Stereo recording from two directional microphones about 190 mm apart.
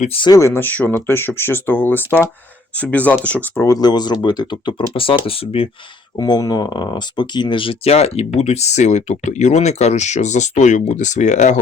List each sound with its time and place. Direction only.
0.0 s speech: 30° left (ahead or behind)